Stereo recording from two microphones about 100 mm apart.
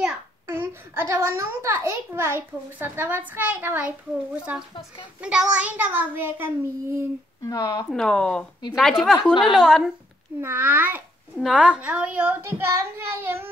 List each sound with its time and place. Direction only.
0.5 s a sound: 25° right (ahead or behind)
1.1 s a child's voice: 30° right (ahead or behind)
7.4 s speech: 35° left (ahead or behind)
7.9 s speech: 5° left (ahead or behind)
9.0 s a woman's voice: 5° right (ahead or behind)
10.4 s a child's voice: 20° right (ahead or behind)
11.3 s a child's voice: 5° right (ahead or behind); by 13.5 s 25° right (ahead or behind)